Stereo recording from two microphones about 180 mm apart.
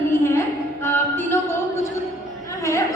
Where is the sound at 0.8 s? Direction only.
10° left (ahead or behind).